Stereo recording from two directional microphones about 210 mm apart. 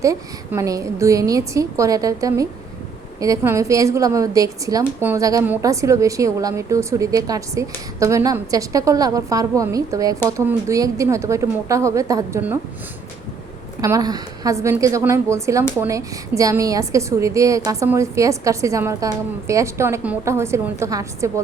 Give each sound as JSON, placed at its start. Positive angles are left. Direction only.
{"t": 0.0, "sound": "a woman's voice", "side_deg": -15}
{"t": 13.8, "sound": "a woman's voice", "side_deg": -15}